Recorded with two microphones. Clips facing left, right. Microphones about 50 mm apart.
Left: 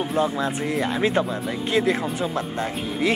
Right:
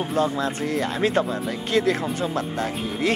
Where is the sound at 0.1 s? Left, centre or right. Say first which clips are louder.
Right 1 dB; centre.